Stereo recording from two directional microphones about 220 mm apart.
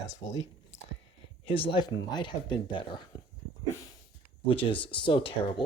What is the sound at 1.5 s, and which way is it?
Speech, 25° left (ahead or behind).